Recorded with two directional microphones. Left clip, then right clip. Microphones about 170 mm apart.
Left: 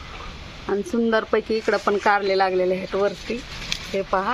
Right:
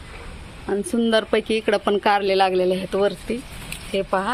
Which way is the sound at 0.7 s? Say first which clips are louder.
Even; 20° right (ahead or behind).